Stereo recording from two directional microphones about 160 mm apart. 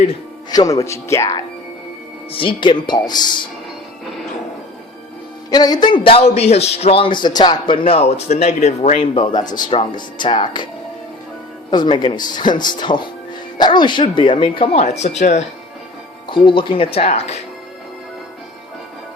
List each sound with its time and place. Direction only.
0.5 s speech: 25° left (ahead or behind)
2.3 s speech: 35° left (ahead or behind)
5.5 s a man's voice: 25° left (ahead or behind)
11.7 s a man's voice: 25° left (ahead or behind); by 15.4 s 45° left (ahead or behind)
16.3 s a man's voice: 30° left (ahead or behind)